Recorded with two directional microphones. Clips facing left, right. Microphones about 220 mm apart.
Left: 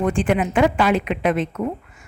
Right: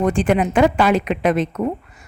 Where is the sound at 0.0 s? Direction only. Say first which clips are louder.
Right 2 dB; 40° right (ahead or behind).